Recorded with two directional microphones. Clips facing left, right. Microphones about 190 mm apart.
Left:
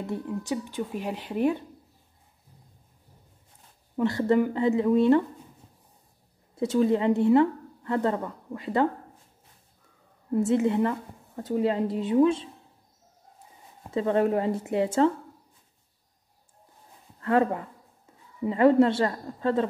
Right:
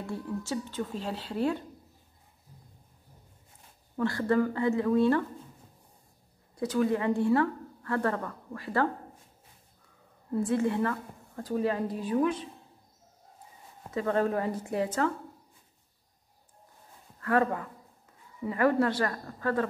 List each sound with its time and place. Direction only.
0.0 s speech: 20° left (ahead or behind)
3.9 s a woman's voice: 20° left (ahead or behind)
6.5 s a woman's voice: 25° left (ahead or behind)
10.3 s a woman's voice: 20° left (ahead or behind)
13.8 s a woman's voice: 25° left (ahead or behind)
17.2 s speech: 25° left (ahead or behind)